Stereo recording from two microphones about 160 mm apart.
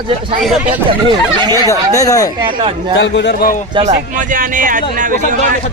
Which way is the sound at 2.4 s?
30° right (ahead or behind).